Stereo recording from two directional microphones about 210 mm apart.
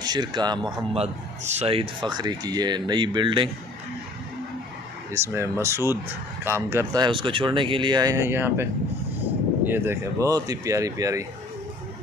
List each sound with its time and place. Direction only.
0.0 s speech: 20° right (ahead or behind)
0.9 s speech: 30° right (ahead or behind)
5.1 s speech: 15° right (ahead or behind)
9.7 s speech: 10° right (ahead or behind)